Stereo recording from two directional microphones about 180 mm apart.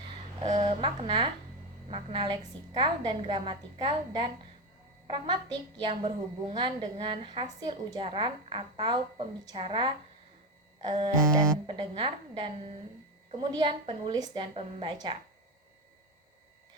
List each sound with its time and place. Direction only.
0.4 s speech: 40° right (ahead or behind)
0.8 s a woman's voice: 25° right (ahead or behind)